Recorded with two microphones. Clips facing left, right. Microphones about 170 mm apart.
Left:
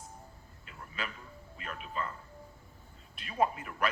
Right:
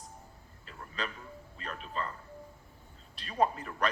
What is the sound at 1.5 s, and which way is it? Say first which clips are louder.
Speech: even; 35° right (ahead or behind).